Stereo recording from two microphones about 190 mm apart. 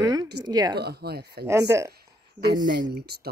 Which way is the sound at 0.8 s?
55° right (ahead or behind).